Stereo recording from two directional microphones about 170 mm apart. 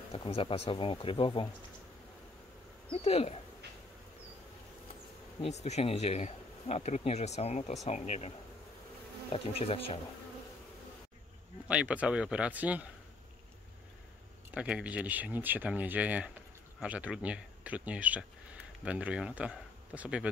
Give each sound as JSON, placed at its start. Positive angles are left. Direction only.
{"t": 0.1, "sound": "speech", "side_deg": 35}
{"t": 2.9, "sound": "speech", "side_deg": 35}
{"t": 5.4, "sound": "speech", "side_deg": 40}
{"t": 9.3, "sound": "speech", "side_deg": 35}
{"t": 11.6, "sound": "speech", "side_deg": -10}
{"t": 14.5, "sound": "speech", "side_deg": -5}